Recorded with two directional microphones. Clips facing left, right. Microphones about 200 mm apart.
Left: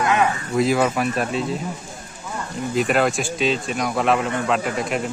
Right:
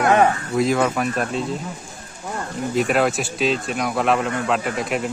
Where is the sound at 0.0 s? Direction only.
50° right (ahead or behind).